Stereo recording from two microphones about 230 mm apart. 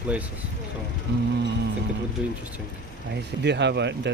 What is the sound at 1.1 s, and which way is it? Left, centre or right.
Speech, right.